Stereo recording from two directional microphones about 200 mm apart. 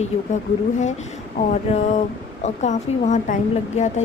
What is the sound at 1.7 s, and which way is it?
A woman's voice, 35° left (ahead or behind).